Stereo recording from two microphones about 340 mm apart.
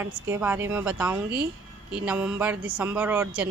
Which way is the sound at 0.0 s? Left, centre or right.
Centre.